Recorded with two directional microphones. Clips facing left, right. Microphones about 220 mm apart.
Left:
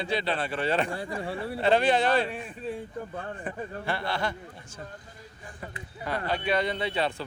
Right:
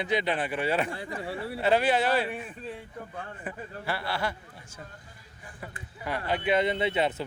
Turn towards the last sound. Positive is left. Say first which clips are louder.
# right 2 dB
turn(degrees=-20)  # may be behind; listen again after turning